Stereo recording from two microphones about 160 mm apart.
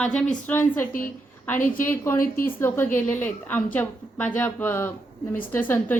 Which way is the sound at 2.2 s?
60° left (ahead or behind).